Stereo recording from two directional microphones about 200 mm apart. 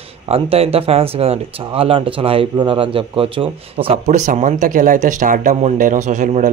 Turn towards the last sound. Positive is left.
turn(degrees=-40)  # may be behind; listen again after turning